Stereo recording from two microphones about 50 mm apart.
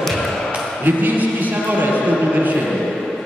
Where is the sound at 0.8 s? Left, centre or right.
Right.